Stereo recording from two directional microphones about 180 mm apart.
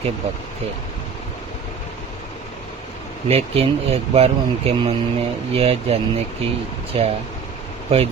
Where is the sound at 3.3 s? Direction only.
35° right (ahead or behind).